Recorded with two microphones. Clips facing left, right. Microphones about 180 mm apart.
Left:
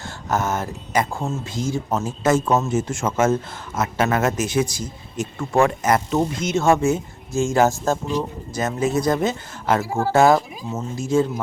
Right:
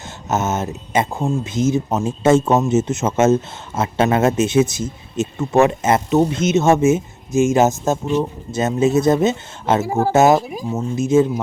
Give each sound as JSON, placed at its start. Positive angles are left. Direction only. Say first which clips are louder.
{"t": 0.3, "sound": "speech", "louder": "right 3 dB", "side_deg": -20}